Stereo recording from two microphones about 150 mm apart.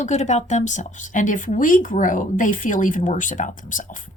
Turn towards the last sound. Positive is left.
turn(degrees=60)  # may be behind; listen again after turning